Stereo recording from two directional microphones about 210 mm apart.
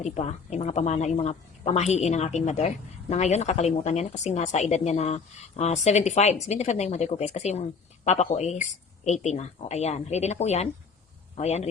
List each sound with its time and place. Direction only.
0.0 s a woman's voice: 30° left (ahead or behind)